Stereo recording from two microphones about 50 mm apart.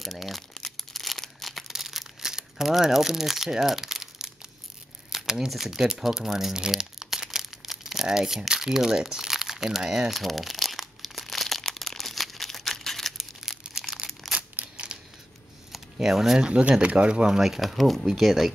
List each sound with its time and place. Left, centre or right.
0.0 s speech: centre
0.7 s a sound: centre
1.7 s crumpling: centre
5.1 s shuffling cards: centre
5.5 s speech: centre
6.7 s crumpling: centre
13.2 s crumpling: centre
14.2 s a sound: centre
15.7 s a sound: centre
16.3 s speech: right
17.4 s speech: centre